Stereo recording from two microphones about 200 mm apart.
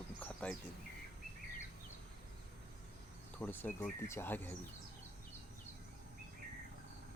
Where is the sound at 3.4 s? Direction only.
10° left (ahead or behind).